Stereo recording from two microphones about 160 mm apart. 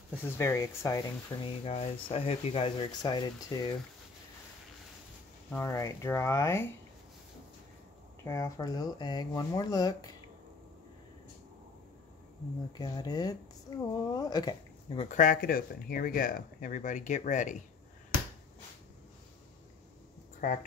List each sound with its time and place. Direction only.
0.2 s speech: 15° left (ahead or behind)
1.6 s speech: 35° left (ahead or behind)
5.5 s speech: 15° left (ahead or behind)
8.2 s speech: 20° left (ahead or behind)
12.7 s speech: 25° left (ahead or behind)
14.9 s speech: 45° left (ahead or behind)